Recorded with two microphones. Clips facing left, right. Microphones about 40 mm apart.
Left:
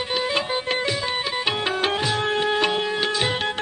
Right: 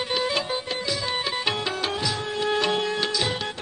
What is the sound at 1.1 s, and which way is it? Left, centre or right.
Music, centre.